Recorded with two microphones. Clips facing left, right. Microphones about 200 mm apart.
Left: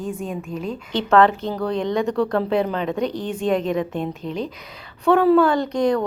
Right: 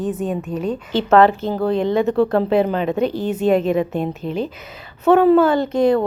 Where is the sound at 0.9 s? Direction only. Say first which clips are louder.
Right 3 dB; 5° right (ahead or behind).